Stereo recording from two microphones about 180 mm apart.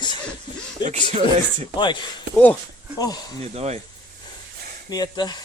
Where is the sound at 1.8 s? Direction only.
25° left (ahead or behind).